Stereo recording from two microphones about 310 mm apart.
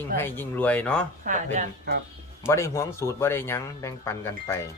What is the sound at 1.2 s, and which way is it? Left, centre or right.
Speech, right.